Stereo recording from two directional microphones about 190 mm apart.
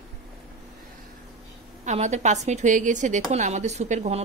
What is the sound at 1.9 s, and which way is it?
A woman's voice, 35° right (ahead or behind).